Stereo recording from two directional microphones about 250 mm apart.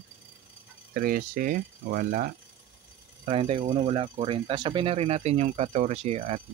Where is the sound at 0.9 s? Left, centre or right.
Right.